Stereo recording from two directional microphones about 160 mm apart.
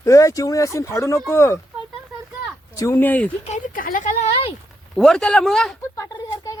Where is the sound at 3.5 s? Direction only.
60° left (ahead or behind).